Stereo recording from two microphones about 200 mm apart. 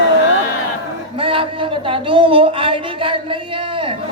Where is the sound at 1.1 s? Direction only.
25° right (ahead or behind).